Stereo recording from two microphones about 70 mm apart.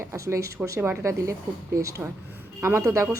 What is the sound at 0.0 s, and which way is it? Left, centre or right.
A woman's voice, right.